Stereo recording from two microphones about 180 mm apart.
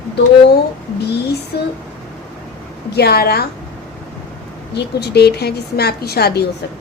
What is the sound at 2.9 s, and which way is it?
Speech, 60° left (ahead or behind).